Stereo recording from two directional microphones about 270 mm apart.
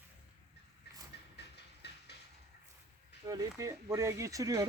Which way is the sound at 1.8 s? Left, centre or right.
Left.